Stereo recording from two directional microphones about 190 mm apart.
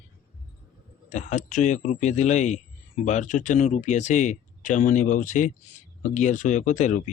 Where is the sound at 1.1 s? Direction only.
40° left (ahead or behind).